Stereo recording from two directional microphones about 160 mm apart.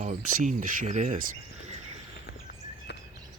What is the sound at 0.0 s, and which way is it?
Speech, 50° right (ahead or behind).